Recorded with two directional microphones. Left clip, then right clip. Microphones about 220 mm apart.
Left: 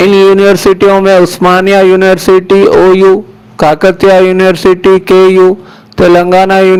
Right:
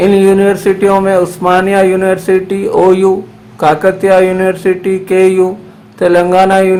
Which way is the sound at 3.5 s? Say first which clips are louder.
Left 3 dB; 40° left (ahead or behind).